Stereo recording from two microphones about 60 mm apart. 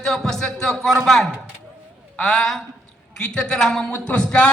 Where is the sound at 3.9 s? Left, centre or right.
Left.